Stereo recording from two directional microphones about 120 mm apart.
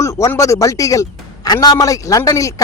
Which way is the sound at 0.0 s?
25° left (ahead or behind).